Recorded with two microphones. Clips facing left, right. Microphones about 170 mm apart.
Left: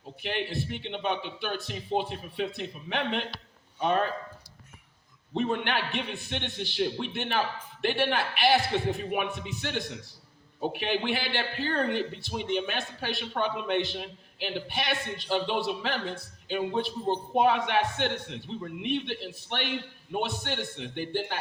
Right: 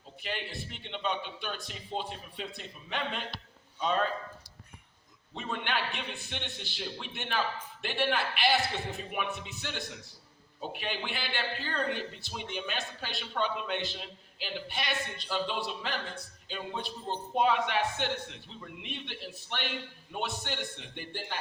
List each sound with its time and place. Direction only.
0.2 s a man's voice: 60° left (ahead or behind)
5.4 s a man's voice: 55° left (ahead or behind)